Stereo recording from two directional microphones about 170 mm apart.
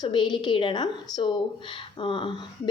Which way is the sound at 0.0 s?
25° left (ahead or behind).